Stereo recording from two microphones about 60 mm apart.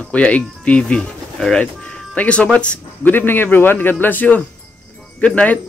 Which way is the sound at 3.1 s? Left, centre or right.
Left.